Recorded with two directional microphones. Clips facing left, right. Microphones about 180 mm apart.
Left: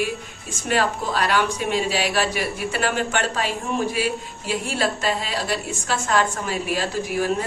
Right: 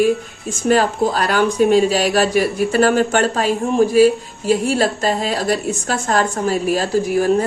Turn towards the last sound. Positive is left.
turn(degrees=-40)  # may be behind; listen again after turning